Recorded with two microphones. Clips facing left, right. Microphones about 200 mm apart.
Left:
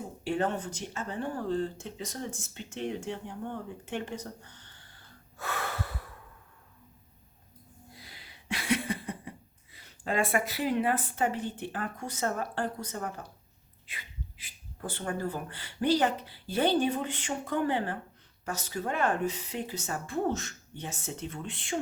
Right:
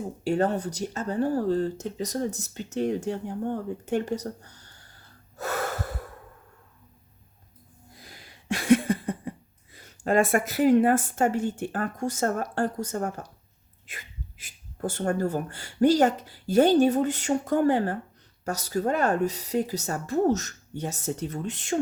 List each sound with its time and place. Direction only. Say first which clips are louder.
0.3 s speech: right 5 dB; 40° right (ahead or behind)
7.9 s a sound: right 3 dB; 45° right (ahead or behind)
9.7 s a woman's voice: right 8 dB; 45° right (ahead or behind)